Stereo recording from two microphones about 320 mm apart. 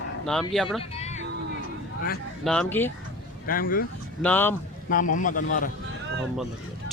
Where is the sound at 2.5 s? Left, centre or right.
Centre.